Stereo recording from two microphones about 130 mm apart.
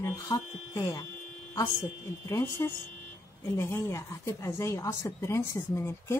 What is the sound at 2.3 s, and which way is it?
A woman's voice, 20° left (ahead or behind).